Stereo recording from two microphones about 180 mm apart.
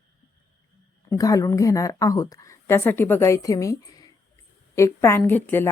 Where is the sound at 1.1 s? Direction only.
20° left (ahead or behind).